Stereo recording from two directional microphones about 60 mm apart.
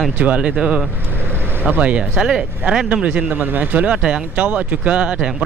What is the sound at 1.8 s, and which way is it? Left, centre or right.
Speech, centre.